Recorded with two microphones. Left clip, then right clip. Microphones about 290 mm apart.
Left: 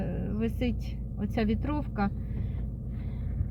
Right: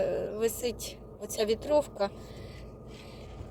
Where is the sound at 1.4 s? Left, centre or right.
Centre.